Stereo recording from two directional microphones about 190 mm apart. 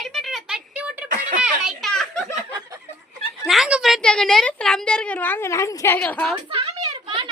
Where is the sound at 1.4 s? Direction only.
Centre (ahead or behind).